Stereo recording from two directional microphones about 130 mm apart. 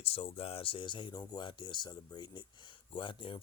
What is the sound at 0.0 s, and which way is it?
Speech, 50° left (ahead or behind).